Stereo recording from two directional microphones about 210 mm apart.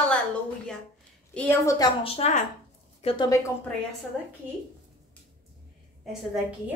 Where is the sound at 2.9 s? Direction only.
25° left (ahead or behind).